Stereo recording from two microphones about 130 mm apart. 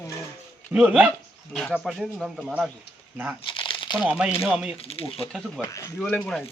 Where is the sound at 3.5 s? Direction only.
40° left (ahead or behind).